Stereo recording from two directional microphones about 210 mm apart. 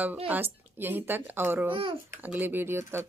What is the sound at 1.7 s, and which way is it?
Speech, 25° right (ahead or behind).